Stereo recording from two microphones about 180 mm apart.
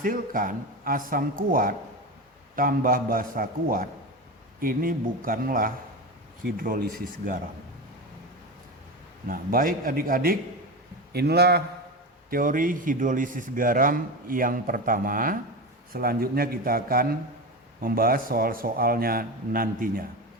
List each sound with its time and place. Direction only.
0.0 s speech: 50° right (ahead or behind)
9.2 s a man's voice: 50° right (ahead or behind)
12.3 s a man's voice: 50° right (ahead or behind)